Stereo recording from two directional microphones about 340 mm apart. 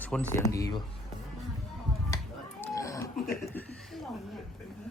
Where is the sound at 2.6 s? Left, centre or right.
Centre.